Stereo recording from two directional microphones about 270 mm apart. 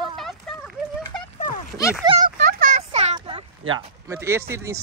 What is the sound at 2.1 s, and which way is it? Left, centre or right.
Speech, centre.